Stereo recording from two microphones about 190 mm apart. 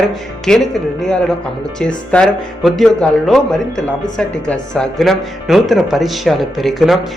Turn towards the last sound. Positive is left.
turn(degrees=0)  # may be behind; listen again after turning